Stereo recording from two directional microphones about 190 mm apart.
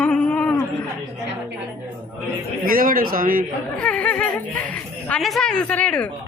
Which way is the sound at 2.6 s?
45° right (ahead or behind).